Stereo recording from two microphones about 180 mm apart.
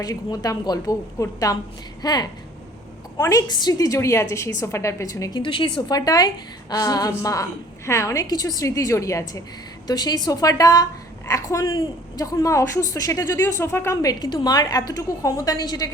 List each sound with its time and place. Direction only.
0.0 s a woman's voice: 20° left (ahead or behind)